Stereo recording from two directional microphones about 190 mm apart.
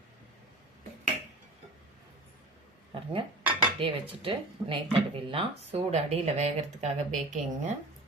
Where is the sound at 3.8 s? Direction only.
25° right (ahead or behind).